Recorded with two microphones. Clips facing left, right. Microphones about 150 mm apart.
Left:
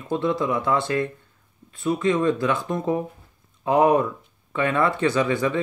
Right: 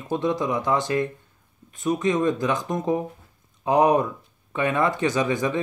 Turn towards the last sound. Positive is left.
turn(degrees=-20)  # may be behind; listen again after turning